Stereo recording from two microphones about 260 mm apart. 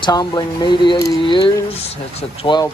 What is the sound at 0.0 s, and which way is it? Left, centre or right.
Speech, centre.